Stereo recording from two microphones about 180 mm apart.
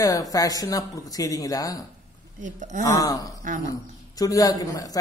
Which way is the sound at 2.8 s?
20° left (ahead or behind).